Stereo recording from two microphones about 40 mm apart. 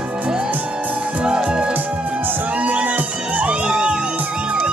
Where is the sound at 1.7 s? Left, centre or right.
Right.